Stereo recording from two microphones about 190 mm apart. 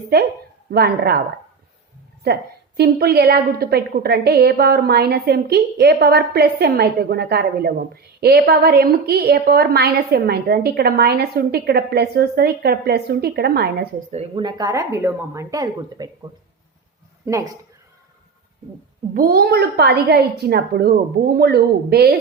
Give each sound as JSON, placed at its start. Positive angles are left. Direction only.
{"t": 0.7, "sound": "a woman's voice", "side_deg": -55}
{"t": 2.2, "sound": "a woman's voice", "side_deg": -55}
{"t": 14.1, "sound": "speech", "side_deg": -30}
{"t": 17.2, "sound": "speech", "side_deg": -15}
{"t": 19.1, "sound": "a woman's voice", "side_deg": -50}